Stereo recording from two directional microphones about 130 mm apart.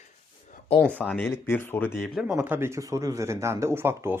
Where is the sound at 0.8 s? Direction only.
10° left (ahead or behind).